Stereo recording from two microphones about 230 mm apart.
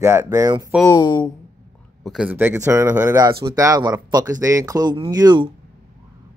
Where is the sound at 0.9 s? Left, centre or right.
Centre.